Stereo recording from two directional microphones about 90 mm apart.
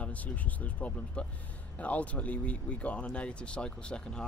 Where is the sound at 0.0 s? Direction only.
15° left (ahead or behind).